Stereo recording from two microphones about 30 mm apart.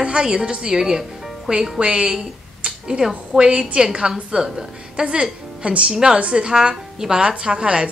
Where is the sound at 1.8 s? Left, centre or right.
Right.